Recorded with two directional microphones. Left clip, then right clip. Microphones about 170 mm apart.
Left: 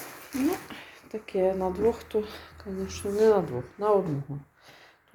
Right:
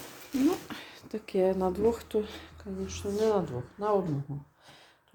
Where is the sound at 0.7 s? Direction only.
25° right (ahead or behind); by 2.6 s 10° right (ahead or behind).